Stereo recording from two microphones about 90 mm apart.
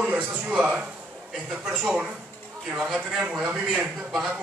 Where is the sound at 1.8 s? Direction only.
15° right (ahead or behind).